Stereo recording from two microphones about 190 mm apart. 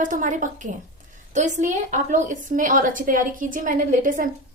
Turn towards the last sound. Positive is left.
turn(degrees=-45)  # may be behind; listen again after turning